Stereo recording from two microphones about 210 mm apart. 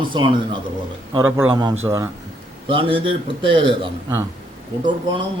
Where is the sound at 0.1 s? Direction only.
25° right (ahead or behind).